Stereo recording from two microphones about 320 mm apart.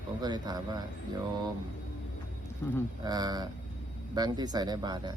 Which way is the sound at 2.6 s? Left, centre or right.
Centre.